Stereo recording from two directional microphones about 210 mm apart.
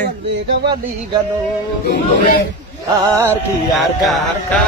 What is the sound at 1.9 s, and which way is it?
Speech, 50° left (ahead or behind).